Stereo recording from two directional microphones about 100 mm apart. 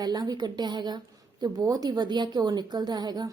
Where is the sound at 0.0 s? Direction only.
40° right (ahead or behind).